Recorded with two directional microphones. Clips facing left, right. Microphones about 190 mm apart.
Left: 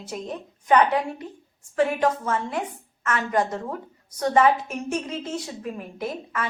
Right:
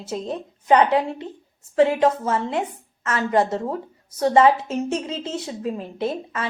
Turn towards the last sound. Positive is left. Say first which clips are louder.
# right 4 dB
turn(degrees=-25)  # may be behind; listen again after turning